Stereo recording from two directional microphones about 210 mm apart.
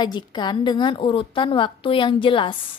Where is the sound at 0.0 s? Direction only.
20° left (ahead or behind).